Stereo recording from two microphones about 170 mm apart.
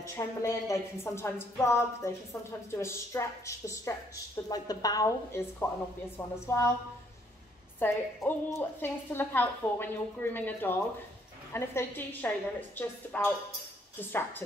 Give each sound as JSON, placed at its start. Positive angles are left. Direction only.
{"t": 0.1, "sound": "a woman's voice", "side_deg": 15}
{"t": 7.8, "sound": "a woman's voice", "side_deg": 15}